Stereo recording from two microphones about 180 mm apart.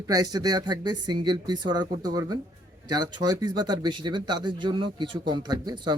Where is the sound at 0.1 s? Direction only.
20° right (ahead or behind).